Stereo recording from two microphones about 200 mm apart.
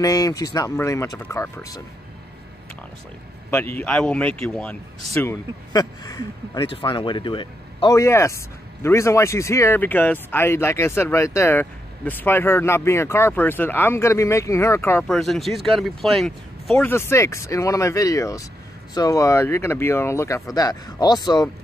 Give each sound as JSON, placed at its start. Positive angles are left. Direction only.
{"t": 0.0, "sound": "speech", "side_deg": 15}
{"t": 3.4, "sound": "speech", "side_deg": 10}